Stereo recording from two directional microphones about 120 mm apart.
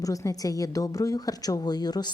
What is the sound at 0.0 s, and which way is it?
Speech, 30° left (ahead or behind).